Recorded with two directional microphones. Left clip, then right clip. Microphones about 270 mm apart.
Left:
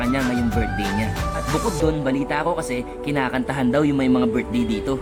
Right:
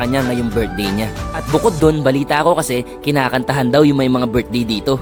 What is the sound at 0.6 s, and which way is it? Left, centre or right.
A man's voice, right.